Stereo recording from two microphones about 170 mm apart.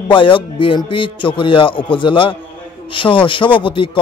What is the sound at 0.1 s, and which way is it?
A man's voice, 30° left (ahead or behind).